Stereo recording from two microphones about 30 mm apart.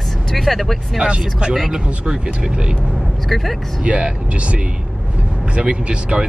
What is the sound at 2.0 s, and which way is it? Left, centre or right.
Speech, right.